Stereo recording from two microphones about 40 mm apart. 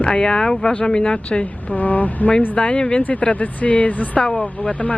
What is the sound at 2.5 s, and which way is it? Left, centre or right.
Speech, left.